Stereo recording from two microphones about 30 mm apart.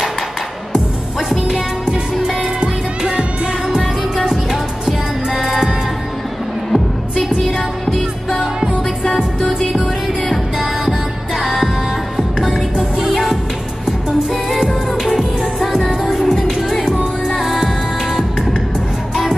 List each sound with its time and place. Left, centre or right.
2.2 s music: right
5.3 s music: centre
6.7 s music: centre
9.7 s music: centre
14.3 s music: centre